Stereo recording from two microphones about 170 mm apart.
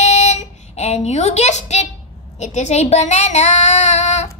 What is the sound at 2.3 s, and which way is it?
Child singing, 45° left (ahead or behind).